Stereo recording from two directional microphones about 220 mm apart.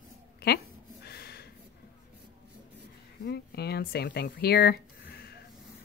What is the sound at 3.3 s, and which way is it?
Speech, 45° left (ahead or behind).